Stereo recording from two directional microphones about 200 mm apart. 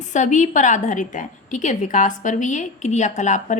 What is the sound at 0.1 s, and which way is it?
A woman's voice, 40° left (ahead or behind).